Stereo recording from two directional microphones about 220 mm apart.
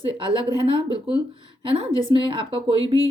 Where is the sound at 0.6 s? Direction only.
25° right (ahead or behind).